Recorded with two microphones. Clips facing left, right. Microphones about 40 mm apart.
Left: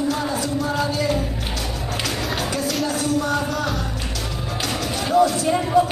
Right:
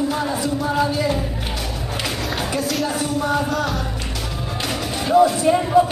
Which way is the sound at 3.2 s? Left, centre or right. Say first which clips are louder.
Right 2 dB; centre.